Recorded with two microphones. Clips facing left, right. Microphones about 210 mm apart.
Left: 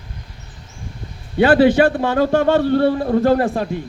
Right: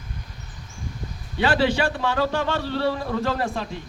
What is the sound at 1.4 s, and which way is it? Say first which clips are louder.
A man's voice: left 9 dB; 55° left (ahead or behind).